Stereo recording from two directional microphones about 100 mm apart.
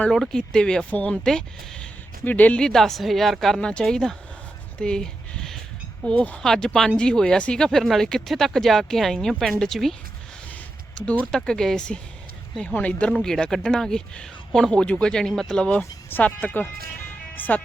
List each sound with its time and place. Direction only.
0.1 s speech: 5° left (ahead or behind)
4.8 s a sound: 10° left (ahead or behind)
6.1 s speech: 15° left (ahead or behind)
15.8 s speech: 20° left (ahead or behind)